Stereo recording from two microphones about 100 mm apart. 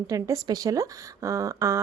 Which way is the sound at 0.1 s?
35° right (ahead or behind).